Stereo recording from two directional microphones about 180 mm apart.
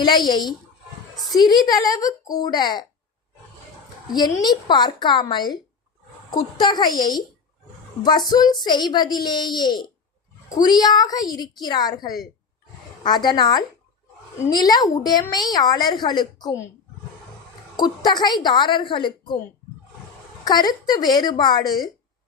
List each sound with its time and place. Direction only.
0.0 s speech: 25° left (ahead or behind)
4.4 s speech: 25° left (ahead or behind)
6.6 s speech: 25° left (ahead or behind)
17.7 s speech: 25° left (ahead or behind)
20.4 s speech: 20° left (ahead or behind)